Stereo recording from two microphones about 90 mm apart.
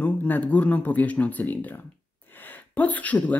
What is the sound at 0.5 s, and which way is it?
Speech, 15° left (ahead or behind).